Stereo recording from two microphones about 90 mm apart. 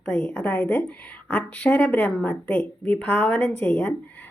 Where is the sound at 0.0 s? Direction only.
15° left (ahead or behind).